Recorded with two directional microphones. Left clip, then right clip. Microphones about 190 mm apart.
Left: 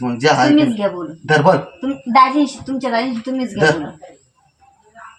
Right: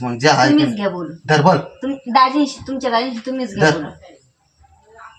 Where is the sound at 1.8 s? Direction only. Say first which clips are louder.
Left 2 dB; 5° left (ahead or behind).